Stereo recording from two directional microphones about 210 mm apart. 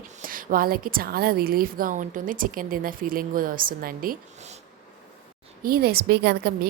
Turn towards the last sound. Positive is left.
turn(degrees=-50)  # may be behind; listen again after turning